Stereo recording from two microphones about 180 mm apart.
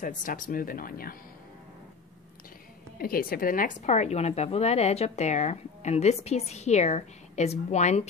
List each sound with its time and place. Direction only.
0.0 s speech: 45° left (ahead or behind)
3.0 s speech: 55° left (ahead or behind); by 8.1 s 40° left (ahead or behind)